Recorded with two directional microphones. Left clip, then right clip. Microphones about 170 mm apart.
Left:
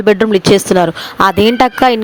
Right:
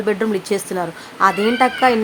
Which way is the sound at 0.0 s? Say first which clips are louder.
Left 10 dB; 55° left (ahead or behind).